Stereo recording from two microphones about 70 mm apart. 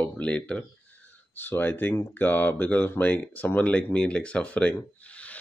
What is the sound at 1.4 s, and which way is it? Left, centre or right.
Speech, left.